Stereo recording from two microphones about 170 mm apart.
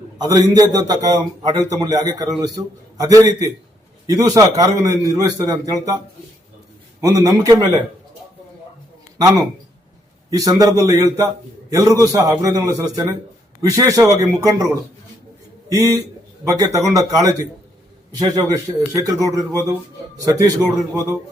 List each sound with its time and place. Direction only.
0.2 s a man's voice: 20° right (ahead or behind)
7.0 s a man's voice: 20° right (ahead or behind)
9.1 s a man's voice: 20° right (ahead or behind)